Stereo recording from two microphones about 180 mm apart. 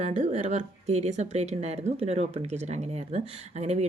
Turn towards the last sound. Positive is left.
turn(degrees=-35)  # may be behind; listen again after turning